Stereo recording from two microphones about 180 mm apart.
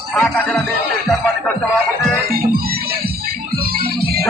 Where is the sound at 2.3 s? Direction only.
55° right (ahead or behind).